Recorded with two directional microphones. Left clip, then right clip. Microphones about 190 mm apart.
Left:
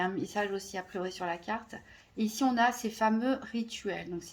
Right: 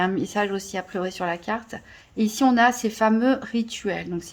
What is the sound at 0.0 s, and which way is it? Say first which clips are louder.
Speech: right 8 dB; 35° right (ahead or behind).